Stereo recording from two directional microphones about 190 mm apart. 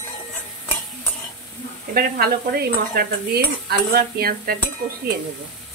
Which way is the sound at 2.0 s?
50° right (ahead or behind).